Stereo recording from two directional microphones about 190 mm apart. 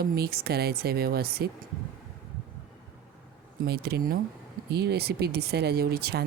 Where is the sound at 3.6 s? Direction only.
55° right (ahead or behind).